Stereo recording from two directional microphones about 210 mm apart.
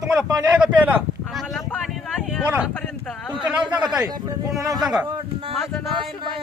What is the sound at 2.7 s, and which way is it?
Speech, 5° left (ahead or behind).